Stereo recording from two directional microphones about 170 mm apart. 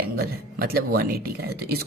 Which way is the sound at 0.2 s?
65° right (ahead or behind).